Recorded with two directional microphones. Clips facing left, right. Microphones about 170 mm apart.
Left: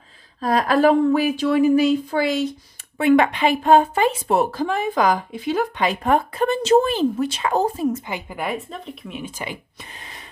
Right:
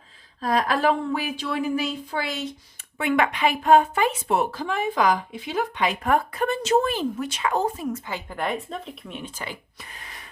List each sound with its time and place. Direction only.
0.3 s a woman's voice: 40° left (ahead or behind)
7.9 s speech: 15° left (ahead or behind)